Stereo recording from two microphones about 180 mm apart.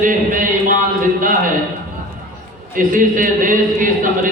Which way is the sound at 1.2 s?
50° right (ahead or behind).